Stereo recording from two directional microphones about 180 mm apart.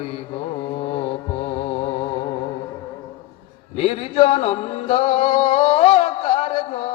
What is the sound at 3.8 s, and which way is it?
Music, 35° left (ahead or behind).